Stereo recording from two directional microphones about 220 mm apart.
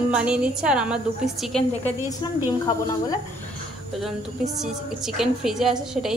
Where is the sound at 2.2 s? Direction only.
20° left (ahead or behind).